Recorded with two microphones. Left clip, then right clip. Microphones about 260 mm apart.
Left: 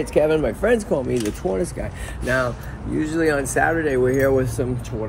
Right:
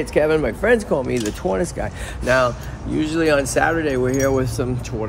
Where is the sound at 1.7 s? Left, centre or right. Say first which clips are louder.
Right 4 dB; right.